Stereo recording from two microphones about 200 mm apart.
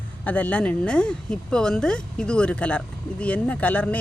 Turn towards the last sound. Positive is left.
turn(degrees=5)  # may be behind; listen again after turning